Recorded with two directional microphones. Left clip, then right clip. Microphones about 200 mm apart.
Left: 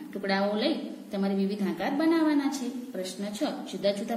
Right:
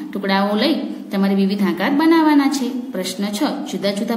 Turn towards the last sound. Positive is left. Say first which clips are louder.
# right 7 dB
turn(degrees=-30)  # may be behind; listen again after turning